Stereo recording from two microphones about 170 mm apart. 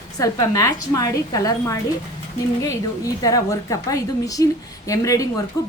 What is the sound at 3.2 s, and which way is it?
A woman's voice, 20° left (ahead or behind).